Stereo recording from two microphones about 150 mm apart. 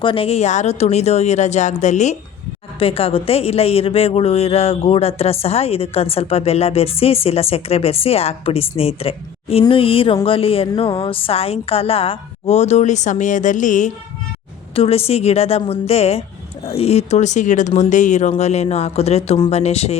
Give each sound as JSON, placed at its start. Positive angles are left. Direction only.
{"t": 0.0, "sound": "speech", "side_deg": 35}
{"t": 2.7, "sound": "a woman's voice", "side_deg": 40}
{"t": 14.8, "sound": "speech", "side_deg": 40}